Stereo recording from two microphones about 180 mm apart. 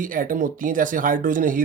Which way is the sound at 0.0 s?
50° right (ahead or behind).